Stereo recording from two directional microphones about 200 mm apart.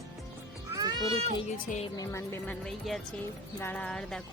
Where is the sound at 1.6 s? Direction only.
35° left (ahead or behind).